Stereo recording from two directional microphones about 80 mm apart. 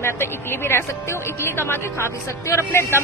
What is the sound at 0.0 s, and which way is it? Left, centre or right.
Speech, left.